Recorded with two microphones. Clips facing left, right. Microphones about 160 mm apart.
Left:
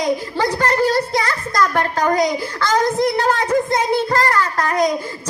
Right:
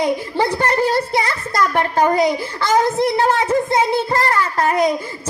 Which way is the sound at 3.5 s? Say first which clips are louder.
Right 1 dB; 25° right (ahead or behind).